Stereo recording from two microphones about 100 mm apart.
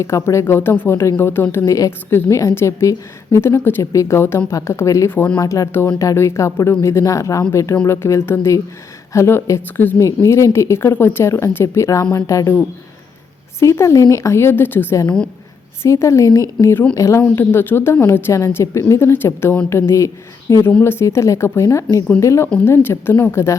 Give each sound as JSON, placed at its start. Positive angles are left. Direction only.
{"t": 0.3, "sound": "a woman's voice", "side_deg": 25}
{"t": 13.6, "sound": "a woman's voice", "side_deg": 30}